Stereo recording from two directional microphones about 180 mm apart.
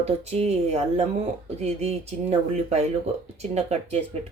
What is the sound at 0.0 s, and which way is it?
Speech, 35° right (ahead or behind).